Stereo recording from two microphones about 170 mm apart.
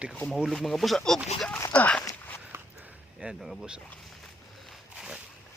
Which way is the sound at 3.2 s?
5° right (ahead or behind).